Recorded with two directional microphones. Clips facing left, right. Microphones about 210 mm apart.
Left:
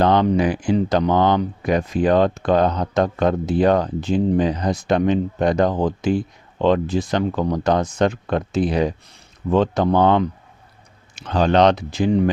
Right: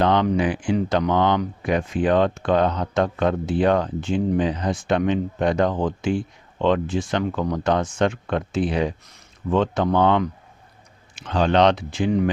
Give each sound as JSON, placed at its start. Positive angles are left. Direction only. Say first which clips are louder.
{"t": 0.0, "sound": "speech", "louder": "left 3 dB", "side_deg": 40}